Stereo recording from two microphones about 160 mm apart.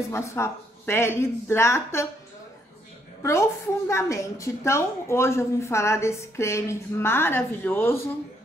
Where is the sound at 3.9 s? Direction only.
20° left (ahead or behind).